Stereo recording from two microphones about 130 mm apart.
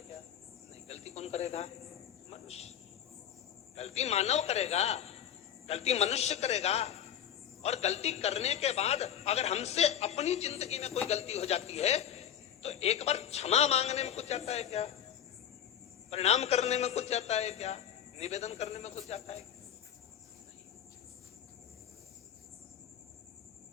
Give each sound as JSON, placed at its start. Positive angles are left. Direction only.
{"t": 0.7, "sound": "cricket", "side_deg": 55}
{"t": 3.8, "sound": "a man's voice", "side_deg": 55}
{"t": 16.0, "sound": "a man's voice", "side_deg": 55}